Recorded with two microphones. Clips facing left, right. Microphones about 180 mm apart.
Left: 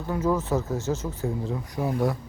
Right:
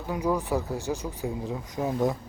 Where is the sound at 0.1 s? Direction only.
15° right (ahead or behind).